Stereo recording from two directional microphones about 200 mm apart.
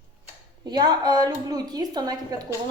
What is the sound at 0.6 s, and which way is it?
A woman's voice, 20° right (ahead or behind).